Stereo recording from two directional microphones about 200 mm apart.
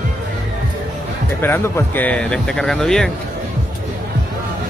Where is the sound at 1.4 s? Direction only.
10° left (ahead or behind).